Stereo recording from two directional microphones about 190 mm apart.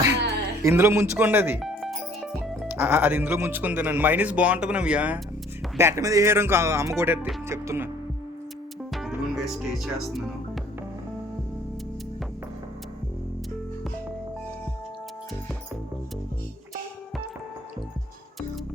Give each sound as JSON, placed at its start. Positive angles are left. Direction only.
{"t": 0.6, "sound": "speech", "side_deg": -15}
{"t": 1.6, "sound": "music", "side_deg": 0}
{"t": 2.6, "sound": "speech", "side_deg": -10}
{"t": 9.0, "sound": "music", "side_deg": 0}